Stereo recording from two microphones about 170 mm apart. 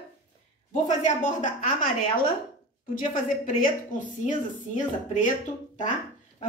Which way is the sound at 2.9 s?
55° left (ahead or behind).